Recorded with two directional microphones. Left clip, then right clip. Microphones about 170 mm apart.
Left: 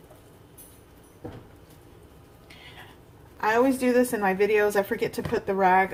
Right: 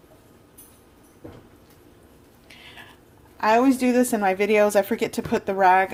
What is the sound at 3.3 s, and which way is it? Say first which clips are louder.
A woman's voice: right 4 dB; 55° right (ahead or behind).